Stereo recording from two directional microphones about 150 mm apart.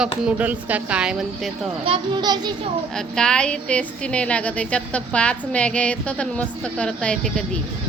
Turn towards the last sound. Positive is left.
turn(degrees=5)  # may be behind; listen again after turning